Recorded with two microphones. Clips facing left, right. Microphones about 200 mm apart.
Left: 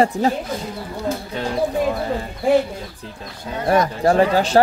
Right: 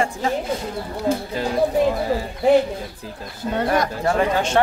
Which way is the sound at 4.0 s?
35° left (ahead or behind).